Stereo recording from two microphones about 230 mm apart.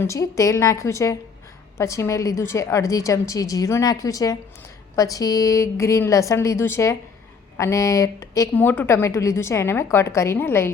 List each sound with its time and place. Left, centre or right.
0.0 s a woman's voice: centre